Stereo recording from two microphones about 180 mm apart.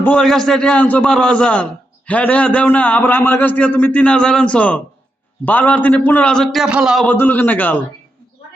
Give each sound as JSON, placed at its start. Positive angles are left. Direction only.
{"t": 0.0, "sound": "a man's voice", "side_deg": 5}
{"t": 7.1, "sound": "a man's voice", "side_deg": 10}